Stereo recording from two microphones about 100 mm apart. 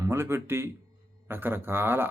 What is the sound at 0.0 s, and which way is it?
Speech, 25° right (ahead or behind).